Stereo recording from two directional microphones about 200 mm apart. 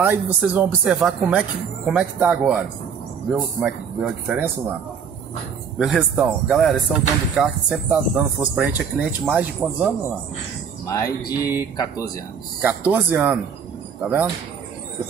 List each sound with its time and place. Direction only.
0.0 s speech: 10° right (ahead or behind)
5.8 s speech: 5° right (ahead or behind)
11.2 s speech: 20° left (ahead or behind)
12.6 s speech: 10° right (ahead or behind)